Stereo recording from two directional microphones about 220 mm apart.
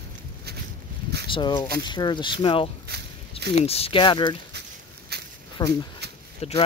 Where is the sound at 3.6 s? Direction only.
25° left (ahead or behind).